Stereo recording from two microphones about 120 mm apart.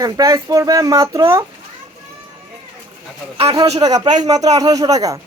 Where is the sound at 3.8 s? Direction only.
30° right (ahead or behind).